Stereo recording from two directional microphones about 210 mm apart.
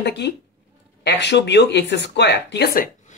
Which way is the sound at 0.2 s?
55° left (ahead or behind).